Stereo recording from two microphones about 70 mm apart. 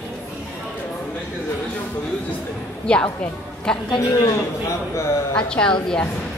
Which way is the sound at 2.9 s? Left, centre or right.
Centre.